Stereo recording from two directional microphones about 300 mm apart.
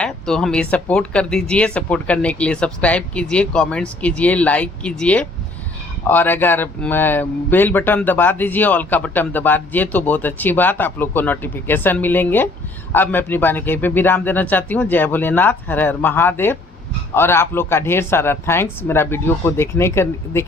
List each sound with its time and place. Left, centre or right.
0.0 s speech: centre